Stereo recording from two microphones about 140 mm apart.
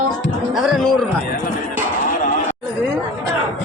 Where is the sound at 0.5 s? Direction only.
Centre (ahead or behind).